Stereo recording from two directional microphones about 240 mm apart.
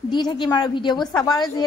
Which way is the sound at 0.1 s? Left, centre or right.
Centre.